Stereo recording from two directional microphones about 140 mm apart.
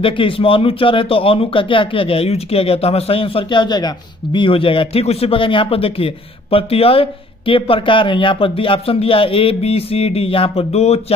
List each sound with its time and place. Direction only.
0.0 s speech: 40° left (ahead or behind)